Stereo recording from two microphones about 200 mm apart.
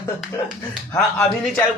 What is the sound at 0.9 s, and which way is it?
Speech, 5° left (ahead or behind).